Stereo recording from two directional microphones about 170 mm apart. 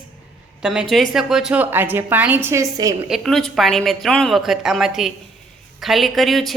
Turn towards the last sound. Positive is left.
turn(degrees=0)  # may be behind; listen again after turning